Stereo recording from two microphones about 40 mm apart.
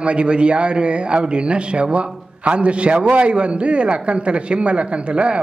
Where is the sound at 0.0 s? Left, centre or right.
Right.